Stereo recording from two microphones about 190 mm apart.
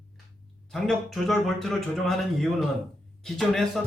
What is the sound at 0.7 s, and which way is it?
A man's voice, centre (ahead or behind).